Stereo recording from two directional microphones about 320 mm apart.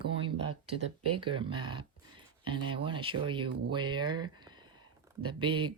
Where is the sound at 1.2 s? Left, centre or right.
Centre.